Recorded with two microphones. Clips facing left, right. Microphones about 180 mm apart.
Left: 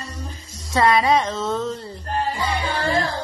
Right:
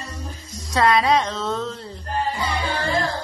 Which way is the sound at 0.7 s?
Centre (ahead or behind).